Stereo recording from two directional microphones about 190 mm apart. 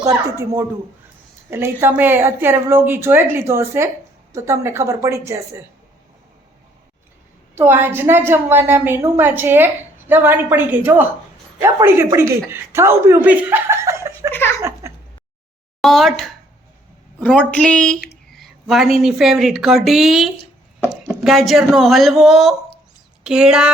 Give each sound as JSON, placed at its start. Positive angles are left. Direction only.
{"t": 0.0, "sound": "a woman's voice", "side_deg": -15}
{"t": 7.5, "sound": "a woman's voice", "side_deg": -10}
{"t": 14.6, "sound": "a sound", "side_deg": -15}
{"t": 15.8, "sound": "a woman's voice", "side_deg": 0}
{"t": 21.1, "sound": "a sound", "side_deg": 0}
{"t": 21.6, "sound": "a woman's voice", "side_deg": 0}